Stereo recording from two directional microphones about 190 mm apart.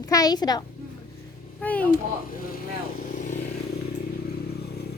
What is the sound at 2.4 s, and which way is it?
Vehicle, 50° left (ahead or behind).